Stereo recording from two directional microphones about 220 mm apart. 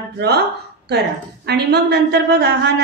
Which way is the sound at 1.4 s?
50° right (ahead or behind).